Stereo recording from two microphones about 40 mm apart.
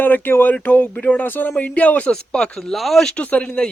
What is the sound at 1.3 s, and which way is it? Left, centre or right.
Speech, left.